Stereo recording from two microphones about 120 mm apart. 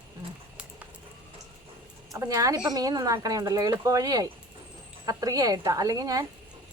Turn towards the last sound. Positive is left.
turn(degrees=-30)  # may be behind; listen again after turning